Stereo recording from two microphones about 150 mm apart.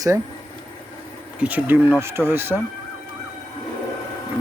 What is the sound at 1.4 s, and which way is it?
Speech, 10° right (ahead or behind).